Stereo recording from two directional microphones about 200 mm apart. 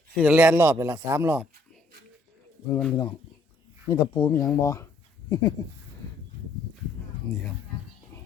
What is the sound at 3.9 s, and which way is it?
Speech, 15° left (ahead or behind).